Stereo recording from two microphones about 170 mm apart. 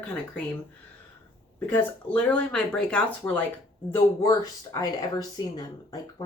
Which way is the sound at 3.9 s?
20° left (ahead or behind).